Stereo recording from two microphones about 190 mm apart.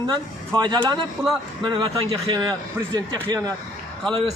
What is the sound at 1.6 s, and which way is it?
Speech, 25° right (ahead or behind).